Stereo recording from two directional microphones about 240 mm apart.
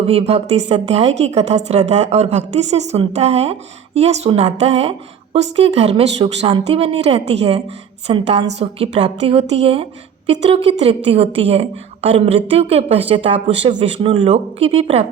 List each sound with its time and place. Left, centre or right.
0.0 s speech: right